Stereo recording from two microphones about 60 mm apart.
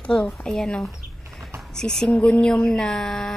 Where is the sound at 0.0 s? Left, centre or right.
Centre.